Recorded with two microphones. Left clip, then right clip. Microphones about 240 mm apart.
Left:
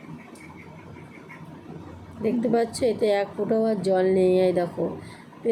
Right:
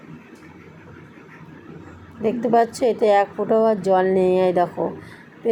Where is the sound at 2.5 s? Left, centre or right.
Centre.